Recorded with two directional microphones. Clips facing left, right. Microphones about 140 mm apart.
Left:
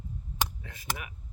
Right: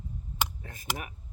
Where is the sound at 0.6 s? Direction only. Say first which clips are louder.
Right 1 dB; 45° right (ahead or behind).